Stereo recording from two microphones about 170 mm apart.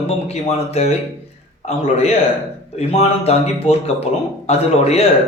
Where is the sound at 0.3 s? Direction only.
40° left (ahead or behind).